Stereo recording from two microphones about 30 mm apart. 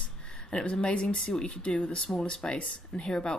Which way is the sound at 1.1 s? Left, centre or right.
Left.